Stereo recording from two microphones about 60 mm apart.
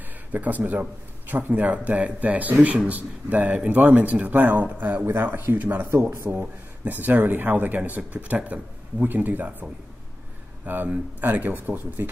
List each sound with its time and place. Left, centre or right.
0.3 s a man's voice: right
5.0 s speech: right
6.2 s speech: centre
6.8 s a man's voice: right